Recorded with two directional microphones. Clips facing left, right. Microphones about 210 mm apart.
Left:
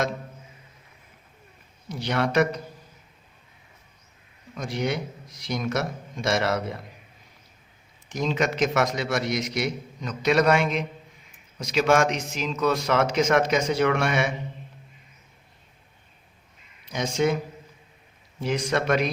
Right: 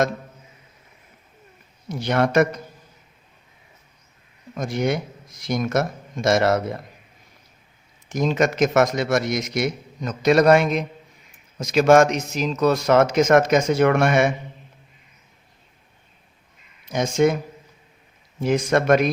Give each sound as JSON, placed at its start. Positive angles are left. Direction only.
{"t": 1.9, "sound": "a man's voice", "side_deg": -50}
{"t": 4.5, "sound": "a man's voice", "side_deg": -50}
{"t": 8.1, "sound": "a man's voice", "side_deg": -45}
{"t": 16.9, "sound": "a man's voice", "side_deg": -50}
{"t": 18.3, "sound": "a man's voice", "side_deg": -50}